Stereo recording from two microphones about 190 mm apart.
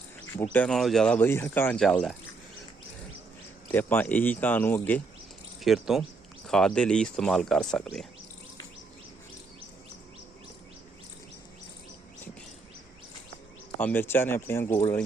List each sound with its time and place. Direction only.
0.3 s speech: 10° left (ahead or behind)
3.7 s speech: 10° left (ahead or behind)
13.7 s speech: 10° left (ahead or behind)